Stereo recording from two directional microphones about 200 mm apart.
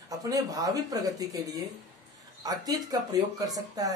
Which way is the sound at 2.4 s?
20° right (ahead or behind).